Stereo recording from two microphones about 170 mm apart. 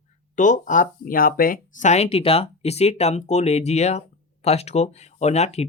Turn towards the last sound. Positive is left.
turn(degrees=40)  # may be behind; listen again after turning